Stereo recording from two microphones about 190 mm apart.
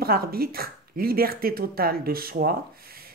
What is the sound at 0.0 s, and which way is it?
Speech, 50° right (ahead or behind).